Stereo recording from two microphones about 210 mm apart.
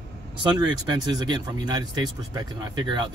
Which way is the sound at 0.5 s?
20° right (ahead or behind).